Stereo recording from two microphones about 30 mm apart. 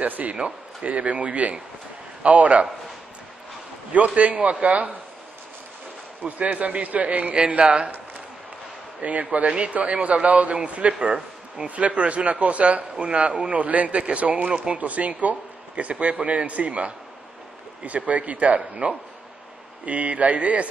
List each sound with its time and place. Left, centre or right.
0.0 s speech: right
0.8 s a man's voice: right
3.9 s a man's voice: right
6.2 s a man's voice: right
7.3 s speech: right
9.0 s a man's voice: right
13.0 s speech: right
13.5 s a man's voice: right